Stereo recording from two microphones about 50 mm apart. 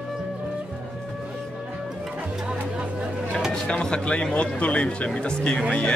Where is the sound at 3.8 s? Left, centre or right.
Centre.